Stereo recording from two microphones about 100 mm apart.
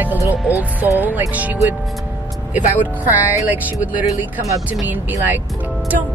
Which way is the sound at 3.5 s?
15° right (ahead or behind).